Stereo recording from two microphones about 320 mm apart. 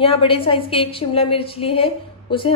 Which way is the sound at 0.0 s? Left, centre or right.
Centre.